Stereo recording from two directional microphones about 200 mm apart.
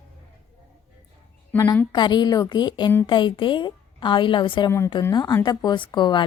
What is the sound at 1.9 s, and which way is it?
A woman's voice, 20° left (ahead or behind).